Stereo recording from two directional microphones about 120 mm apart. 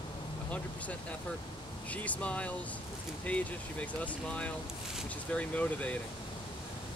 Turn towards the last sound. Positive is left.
turn(degrees=10)  # may be behind; listen again after turning